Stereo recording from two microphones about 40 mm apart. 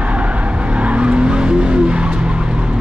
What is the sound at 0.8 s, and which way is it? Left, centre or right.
Vehicle, right.